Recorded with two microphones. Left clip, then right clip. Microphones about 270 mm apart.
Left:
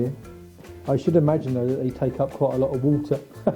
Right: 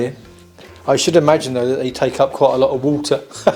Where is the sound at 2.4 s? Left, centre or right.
Right.